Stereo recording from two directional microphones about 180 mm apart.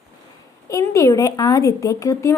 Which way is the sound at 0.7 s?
20° left (ahead or behind).